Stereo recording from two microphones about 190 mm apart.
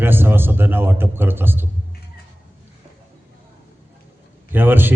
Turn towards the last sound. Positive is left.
turn(degrees=-10)  # may be behind; listen again after turning